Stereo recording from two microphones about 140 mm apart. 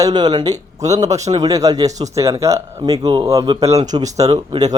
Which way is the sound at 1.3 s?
25° right (ahead or behind).